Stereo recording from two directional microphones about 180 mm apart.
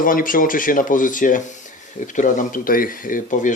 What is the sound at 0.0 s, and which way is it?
Speech, 50° left (ahead or behind).